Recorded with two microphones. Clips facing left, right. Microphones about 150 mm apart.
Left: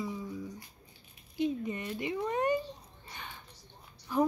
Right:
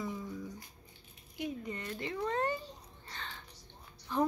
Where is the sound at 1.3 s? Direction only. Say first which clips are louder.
Left 7 dB; 20° left (ahead or behind).